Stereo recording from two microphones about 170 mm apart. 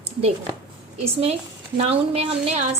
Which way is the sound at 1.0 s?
35° right (ahead or behind).